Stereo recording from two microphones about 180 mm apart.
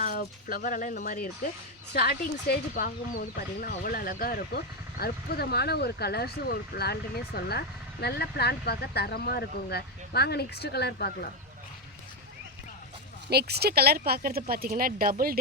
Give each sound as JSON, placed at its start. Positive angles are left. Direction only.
{"t": 0.0, "sound": "speech", "side_deg": 50}
{"t": 1.9, "sound": "speech", "side_deg": 65}
{"t": 13.3, "sound": "speech", "side_deg": -60}